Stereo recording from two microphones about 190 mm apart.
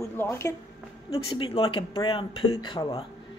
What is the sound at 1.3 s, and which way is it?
Speech, 30° left (ahead or behind).